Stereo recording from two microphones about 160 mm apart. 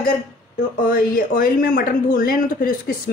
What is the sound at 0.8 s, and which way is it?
Speech, 60° left (ahead or behind).